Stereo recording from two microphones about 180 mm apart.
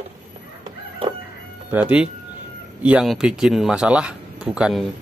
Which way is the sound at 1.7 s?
5° right (ahead or behind).